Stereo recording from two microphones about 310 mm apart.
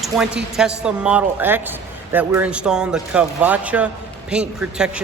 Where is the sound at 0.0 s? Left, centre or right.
Centre.